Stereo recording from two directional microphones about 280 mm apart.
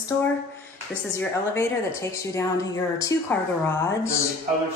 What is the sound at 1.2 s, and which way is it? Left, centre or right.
A woman's voice, centre.